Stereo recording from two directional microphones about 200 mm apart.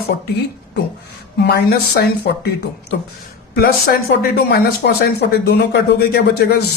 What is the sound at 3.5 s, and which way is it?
Speech, 50° left (ahead or behind).